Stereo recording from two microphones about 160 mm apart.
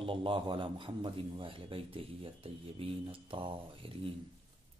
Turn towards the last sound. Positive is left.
turn(degrees=-35)  # may be behind; listen again after turning